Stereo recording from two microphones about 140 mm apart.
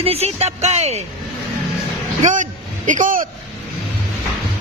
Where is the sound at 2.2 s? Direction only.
65° right (ahead or behind).